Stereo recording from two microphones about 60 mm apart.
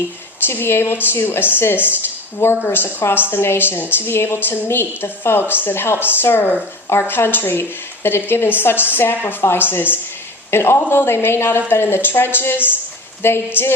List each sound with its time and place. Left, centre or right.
0.4 s a woman's voice: left